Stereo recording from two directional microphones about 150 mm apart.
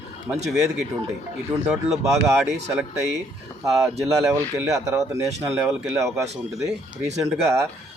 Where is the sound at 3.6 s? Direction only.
Centre (ahead or behind).